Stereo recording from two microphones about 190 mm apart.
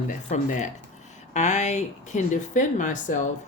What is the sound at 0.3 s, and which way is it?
Speech, 40° left (ahead or behind).